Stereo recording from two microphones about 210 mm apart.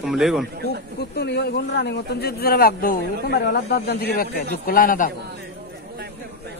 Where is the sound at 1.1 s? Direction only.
50° left (ahead or behind).